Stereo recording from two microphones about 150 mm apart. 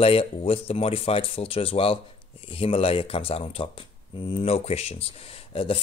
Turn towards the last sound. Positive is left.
turn(degrees=35)  # may be behind; listen again after turning